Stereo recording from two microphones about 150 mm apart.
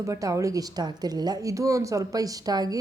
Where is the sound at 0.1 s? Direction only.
20° right (ahead or behind).